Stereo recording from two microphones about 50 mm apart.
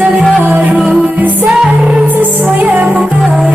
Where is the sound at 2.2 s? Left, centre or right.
Right.